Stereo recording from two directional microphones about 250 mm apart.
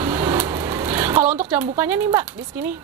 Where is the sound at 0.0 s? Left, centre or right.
Centre.